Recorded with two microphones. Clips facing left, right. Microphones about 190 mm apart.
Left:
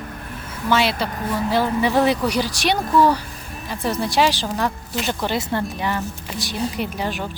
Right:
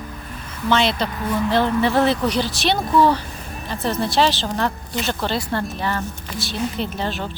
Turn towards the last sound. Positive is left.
turn(degrees=10)  # may be behind; listen again after turning